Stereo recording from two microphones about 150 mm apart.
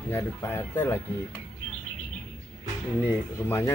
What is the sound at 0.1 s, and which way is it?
Speech, 15° left (ahead or behind).